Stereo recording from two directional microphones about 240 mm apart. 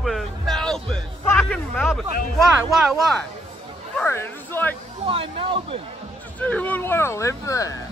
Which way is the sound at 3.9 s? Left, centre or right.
Centre.